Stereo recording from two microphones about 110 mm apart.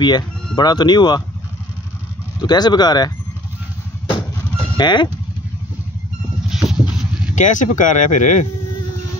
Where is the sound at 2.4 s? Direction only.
40° left (ahead or behind).